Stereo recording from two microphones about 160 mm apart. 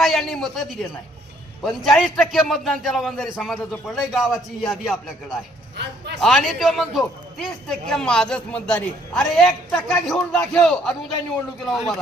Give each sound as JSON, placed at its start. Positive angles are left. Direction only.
{"t": 0.0, "sound": "a man's voice", "side_deg": 0}
{"t": 5.7, "sound": "a man's voice", "side_deg": -90}
{"t": 6.2, "sound": "a man's voice", "side_deg": 0}